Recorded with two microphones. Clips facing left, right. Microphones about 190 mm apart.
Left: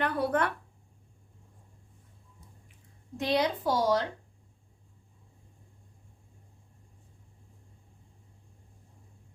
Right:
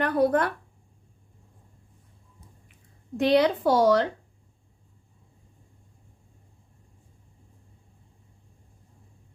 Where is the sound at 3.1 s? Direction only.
70° right (ahead or behind).